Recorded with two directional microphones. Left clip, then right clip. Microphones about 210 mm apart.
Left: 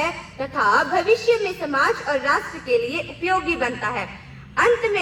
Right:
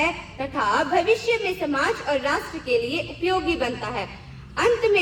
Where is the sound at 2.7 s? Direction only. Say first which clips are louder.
Left 2 dB; 10° right (ahead or behind).